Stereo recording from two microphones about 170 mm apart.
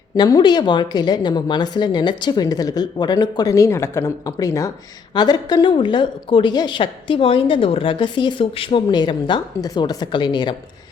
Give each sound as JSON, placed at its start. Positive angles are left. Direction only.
{"t": 0.2, "sound": "a woman's voice", "side_deg": 25}